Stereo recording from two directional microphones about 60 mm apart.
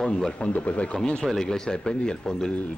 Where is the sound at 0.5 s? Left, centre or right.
Left.